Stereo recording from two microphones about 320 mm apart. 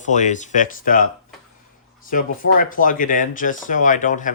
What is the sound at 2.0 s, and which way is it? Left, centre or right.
Speech, left.